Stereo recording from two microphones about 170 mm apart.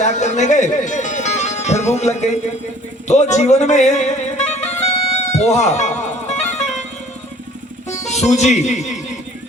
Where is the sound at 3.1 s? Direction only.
45° left (ahead or behind).